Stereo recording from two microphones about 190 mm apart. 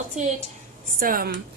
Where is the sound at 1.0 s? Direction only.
50° right (ahead or behind).